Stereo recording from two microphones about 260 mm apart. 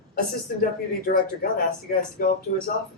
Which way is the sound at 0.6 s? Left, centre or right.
Left.